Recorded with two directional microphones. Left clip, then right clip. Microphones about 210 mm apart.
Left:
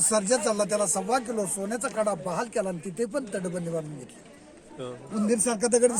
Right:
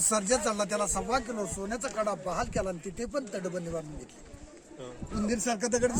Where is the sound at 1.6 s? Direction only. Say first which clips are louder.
Left 3 dB; 45° left (ahead or behind).